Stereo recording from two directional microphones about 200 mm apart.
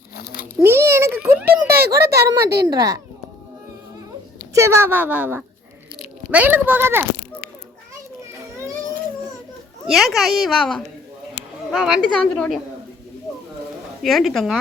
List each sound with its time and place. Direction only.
0.2 s cat: 50° left (ahead or behind)
0.6 s a sound: 10° right (ahead or behind)
1.9 s speech: 15° right (ahead or behind)
4.5 s speech: 15° right (ahead or behind)
9.8 s a child's voice: centre (ahead or behind)
14.0 s a child's voice: centre (ahead or behind)